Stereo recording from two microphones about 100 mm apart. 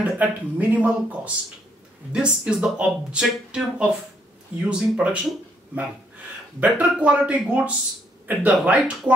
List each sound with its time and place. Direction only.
0.0 s speech: 15° right (ahead or behind)
6.6 s speech: 15° right (ahead or behind)